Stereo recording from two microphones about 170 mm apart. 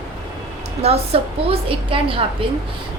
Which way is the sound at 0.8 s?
35° right (ahead or behind).